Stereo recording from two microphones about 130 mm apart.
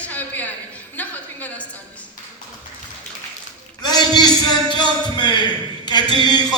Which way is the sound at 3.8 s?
35° left (ahead or behind).